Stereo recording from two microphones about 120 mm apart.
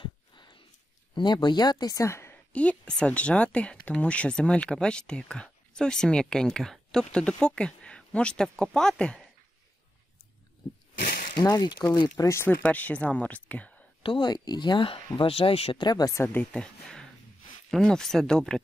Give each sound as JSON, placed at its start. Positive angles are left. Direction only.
{"t": 0.0, "sound": "a sound", "side_deg": 45}
{"t": 1.1, "sound": "speech", "side_deg": 40}
{"t": 2.5, "sound": "speech", "side_deg": 10}
{"t": 11.3, "sound": "speech", "side_deg": 35}
{"t": 12.2, "sound": "speech", "side_deg": 20}
{"t": 12.6, "sound": "speech", "side_deg": 10}
{"t": 14.0, "sound": "speech", "side_deg": 40}
{"t": 15.8, "sound": "speech", "side_deg": 35}
{"t": 16.2, "sound": "speech", "side_deg": 15}